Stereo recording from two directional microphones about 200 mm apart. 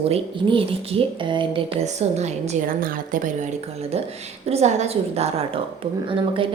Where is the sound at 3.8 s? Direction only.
30° right (ahead or behind).